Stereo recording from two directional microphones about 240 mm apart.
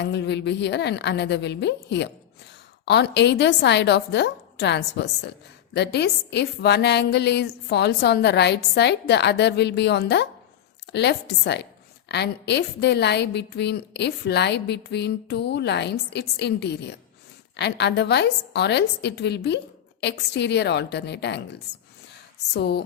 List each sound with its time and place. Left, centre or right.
0.0 s a woman's voice: left
22.5 s a woman's voice: left